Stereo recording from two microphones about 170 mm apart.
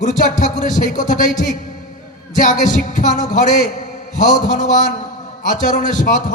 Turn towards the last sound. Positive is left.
turn(degrees=50)  # may be behind; listen again after turning